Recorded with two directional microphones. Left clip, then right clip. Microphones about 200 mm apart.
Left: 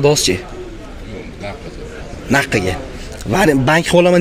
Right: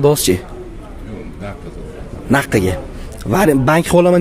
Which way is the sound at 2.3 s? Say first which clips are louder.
Even; 20° right (ahead or behind).